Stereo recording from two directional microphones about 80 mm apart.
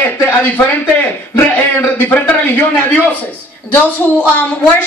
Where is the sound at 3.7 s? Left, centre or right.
Centre.